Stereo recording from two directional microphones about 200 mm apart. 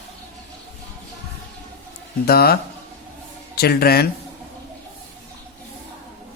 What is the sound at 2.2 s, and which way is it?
A man's voice, 50° left (ahead or behind).